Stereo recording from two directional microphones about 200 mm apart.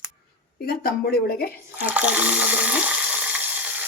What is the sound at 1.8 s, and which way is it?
Water, 5° right (ahead or behind).